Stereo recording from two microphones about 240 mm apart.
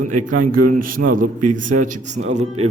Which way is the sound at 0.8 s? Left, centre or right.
Right.